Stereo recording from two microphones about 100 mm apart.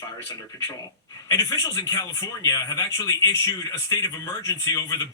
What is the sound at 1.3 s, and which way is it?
Speech, 40° left (ahead or behind).